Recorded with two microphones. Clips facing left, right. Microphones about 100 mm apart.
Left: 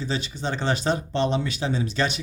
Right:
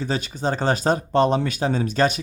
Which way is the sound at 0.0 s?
45° right (ahead or behind).